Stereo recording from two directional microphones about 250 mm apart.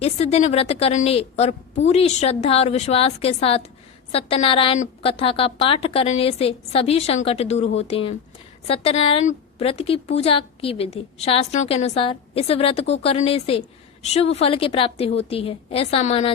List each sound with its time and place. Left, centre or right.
0.0 s a woman's voice: left